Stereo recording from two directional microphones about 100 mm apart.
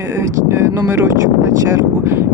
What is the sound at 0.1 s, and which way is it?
Speech, 25° right (ahead or behind).